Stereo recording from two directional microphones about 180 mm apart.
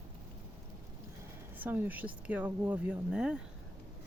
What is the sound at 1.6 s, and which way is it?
Speech, 10° right (ahead or behind).